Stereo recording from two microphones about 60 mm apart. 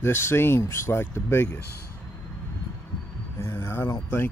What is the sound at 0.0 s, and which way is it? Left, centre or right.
Speech, left.